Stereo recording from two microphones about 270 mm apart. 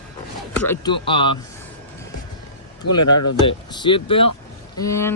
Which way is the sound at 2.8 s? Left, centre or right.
Left.